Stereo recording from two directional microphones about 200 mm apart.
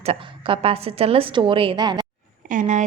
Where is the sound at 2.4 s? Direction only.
40° right (ahead or behind).